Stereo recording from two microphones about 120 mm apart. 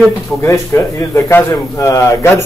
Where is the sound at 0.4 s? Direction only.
25° left (ahead or behind).